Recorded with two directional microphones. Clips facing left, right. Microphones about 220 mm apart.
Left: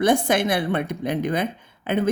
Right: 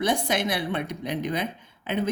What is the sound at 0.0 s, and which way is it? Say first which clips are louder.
A woman's voice: left 6 dB; 50° left (ahead or behind).